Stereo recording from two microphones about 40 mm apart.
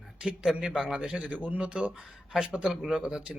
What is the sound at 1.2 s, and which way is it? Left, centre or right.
Speech, right.